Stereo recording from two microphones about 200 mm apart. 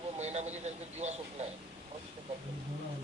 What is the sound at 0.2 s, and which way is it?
Speech, 35° right (ahead or behind).